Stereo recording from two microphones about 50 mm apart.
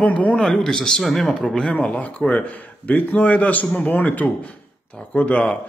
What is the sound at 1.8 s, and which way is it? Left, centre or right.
A man's voice, left.